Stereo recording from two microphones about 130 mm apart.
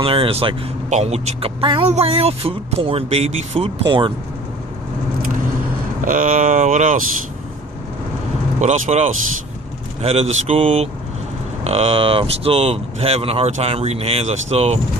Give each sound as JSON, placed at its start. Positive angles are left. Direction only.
{"t": 0.0, "sound": "speech", "side_deg": -45}
{"t": 3.8, "sound": "speech", "side_deg": -40}
{"t": 6.1, "sound": "speech", "side_deg": -90}
{"t": 8.6, "sound": "speech", "side_deg": -60}